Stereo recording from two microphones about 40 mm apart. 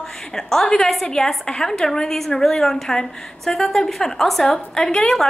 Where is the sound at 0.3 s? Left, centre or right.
Centre.